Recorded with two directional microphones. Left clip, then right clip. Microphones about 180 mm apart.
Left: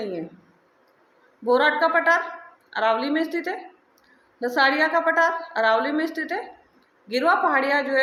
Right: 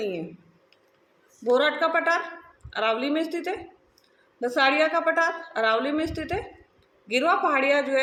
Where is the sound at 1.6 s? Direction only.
15° right (ahead or behind).